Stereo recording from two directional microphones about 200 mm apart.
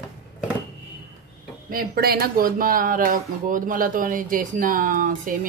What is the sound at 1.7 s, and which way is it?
Speech, 45° right (ahead or behind).